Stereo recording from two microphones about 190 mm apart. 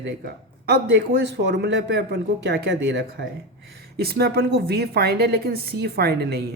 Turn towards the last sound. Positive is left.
turn(degrees=-55)  # may be behind; listen again after turning